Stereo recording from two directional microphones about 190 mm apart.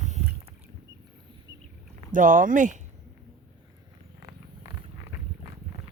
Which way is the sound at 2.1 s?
45° right (ahead or behind).